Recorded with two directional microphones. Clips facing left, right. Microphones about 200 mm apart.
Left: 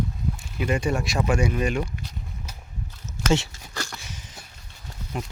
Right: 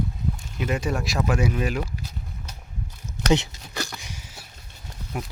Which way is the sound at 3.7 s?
15° right (ahead or behind).